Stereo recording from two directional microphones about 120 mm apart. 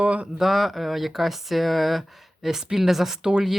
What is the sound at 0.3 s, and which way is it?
Speech, centre (ahead or behind).